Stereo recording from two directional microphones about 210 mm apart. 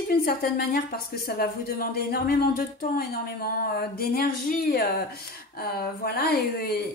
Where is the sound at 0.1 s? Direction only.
45° left (ahead or behind).